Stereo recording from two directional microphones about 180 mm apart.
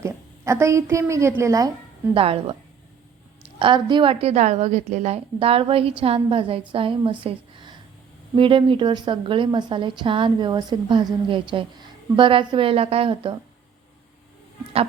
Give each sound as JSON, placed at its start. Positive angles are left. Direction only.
{"t": 0.0, "sound": "a woman's voice", "side_deg": -15}
{"t": 2.1, "sound": "a woman's voice", "side_deg": -30}
{"t": 3.6, "sound": "a woman's voice", "side_deg": -25}